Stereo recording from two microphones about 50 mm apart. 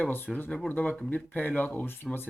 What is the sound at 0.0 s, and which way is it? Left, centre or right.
Speech, left.